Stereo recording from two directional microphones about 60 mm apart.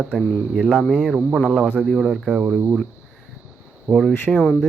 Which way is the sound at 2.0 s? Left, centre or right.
Centre.